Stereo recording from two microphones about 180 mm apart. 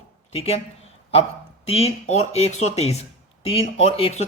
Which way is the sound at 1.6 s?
35° left (ahead or behind).